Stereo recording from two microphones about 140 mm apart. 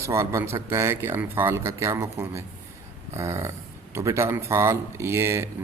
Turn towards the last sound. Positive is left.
turn(degrees=-20)  # may be behind; listen again after turning